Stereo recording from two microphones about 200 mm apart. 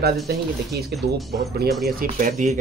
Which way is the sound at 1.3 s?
50° right (ahead or behind).